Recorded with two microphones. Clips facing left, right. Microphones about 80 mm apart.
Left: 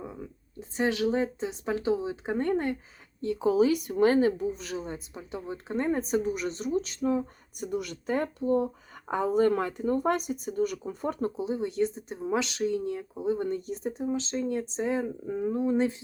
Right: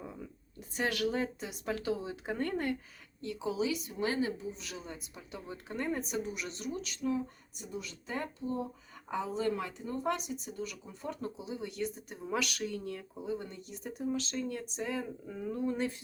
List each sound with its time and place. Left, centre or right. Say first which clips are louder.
0.0 s a sound: left 5 dB; left
0.8 s speech: left 6 dB; left
14.0 s speech: left 3 dB; left